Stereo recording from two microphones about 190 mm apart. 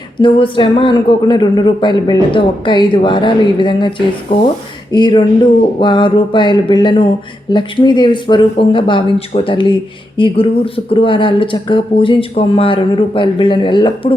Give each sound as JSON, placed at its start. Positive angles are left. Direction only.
{"t": 0.2, "sound": "speech", "side_deg": 25}